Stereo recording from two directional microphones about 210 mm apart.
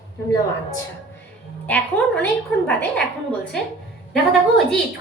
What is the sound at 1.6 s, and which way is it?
A woman's voice, 5° left (ahead or behind).